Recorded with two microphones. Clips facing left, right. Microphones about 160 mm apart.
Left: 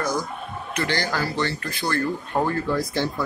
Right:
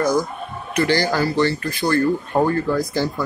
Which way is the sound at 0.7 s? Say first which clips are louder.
Right 7 dB; 5° right (ahead or behind).